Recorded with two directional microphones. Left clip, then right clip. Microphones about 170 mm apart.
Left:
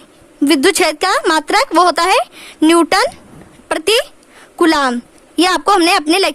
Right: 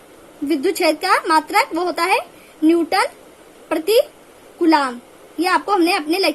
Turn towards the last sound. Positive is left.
turn(degrees=60)  # may be behind; listen again after turning